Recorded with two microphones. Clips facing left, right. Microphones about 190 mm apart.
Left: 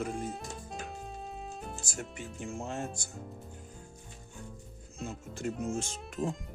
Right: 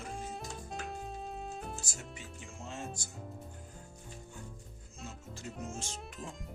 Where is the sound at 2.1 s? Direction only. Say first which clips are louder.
Left 9 dB; 55° left (ahead or behind).